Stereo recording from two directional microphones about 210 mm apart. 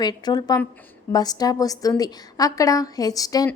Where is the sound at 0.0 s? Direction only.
20° left (ahead or behind).